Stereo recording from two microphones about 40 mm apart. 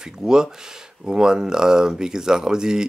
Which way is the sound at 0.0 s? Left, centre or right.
Centre.